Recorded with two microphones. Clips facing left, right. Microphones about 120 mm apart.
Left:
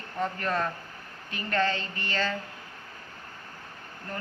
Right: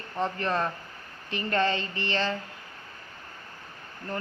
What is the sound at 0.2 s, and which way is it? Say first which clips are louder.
Speech: right 1 dB; 25° right (ahead or behind).